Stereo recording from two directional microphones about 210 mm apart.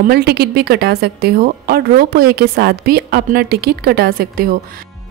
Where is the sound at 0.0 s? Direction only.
50° right (ahead or behind).